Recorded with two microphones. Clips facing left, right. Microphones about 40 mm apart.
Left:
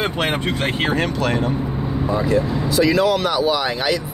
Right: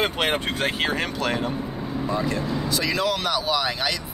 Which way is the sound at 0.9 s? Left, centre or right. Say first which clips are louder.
Left 5 dB; centre.